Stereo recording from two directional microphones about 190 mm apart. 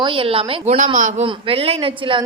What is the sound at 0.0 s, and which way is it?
A woman's voice, 25° right (ahead or behind).